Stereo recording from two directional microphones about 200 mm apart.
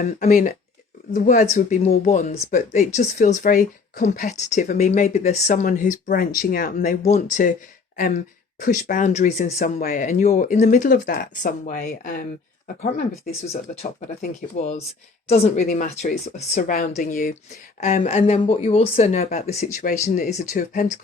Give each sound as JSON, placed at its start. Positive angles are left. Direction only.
{"t": 0.0, "sound": "speech", "side_deg": 40}
{"t": 14.2, "sound": "speech", "side_deg": 35}